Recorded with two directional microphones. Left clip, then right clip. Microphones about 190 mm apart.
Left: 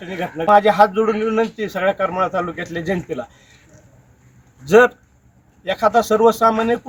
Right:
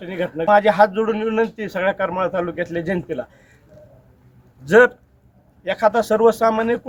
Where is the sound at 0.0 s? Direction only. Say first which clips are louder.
Even; 5° right (ahead or behind).